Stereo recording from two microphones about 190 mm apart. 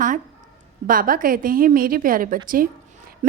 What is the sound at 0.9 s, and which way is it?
A woman's voice, 50° right (ahead or behind).